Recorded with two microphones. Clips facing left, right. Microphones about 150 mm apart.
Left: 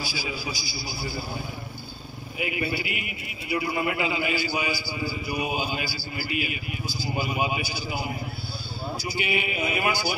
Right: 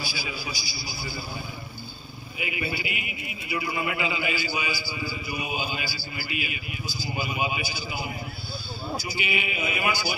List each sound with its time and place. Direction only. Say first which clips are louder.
0.0 s a man's voice: left 2 dB; 40° left (ahead or behind)
2.3 s a man's voice: left 3 dB; 50° left (ahead or behind)
5.4 s a man's voice: left 3 dB; 40° left (ahead or behind)
9.2 s a man's voice: left 4 dB; 45° left (ahead or behind)